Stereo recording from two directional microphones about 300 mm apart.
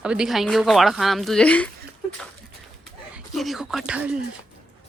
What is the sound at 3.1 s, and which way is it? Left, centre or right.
Speech, centre.